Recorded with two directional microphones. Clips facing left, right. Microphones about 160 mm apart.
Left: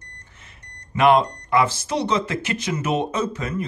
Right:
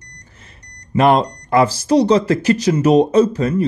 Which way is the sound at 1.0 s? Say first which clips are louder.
Right 3 dB; 40° right (ahead or behind).